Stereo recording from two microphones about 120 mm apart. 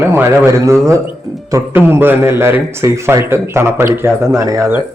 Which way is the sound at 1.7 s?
20° right (ahead or behind).